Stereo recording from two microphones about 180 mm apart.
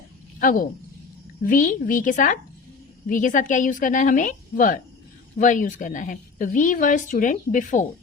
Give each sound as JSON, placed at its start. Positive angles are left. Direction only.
{"t": 0.3, "sound": "a woman's voice", "side_deg": 50}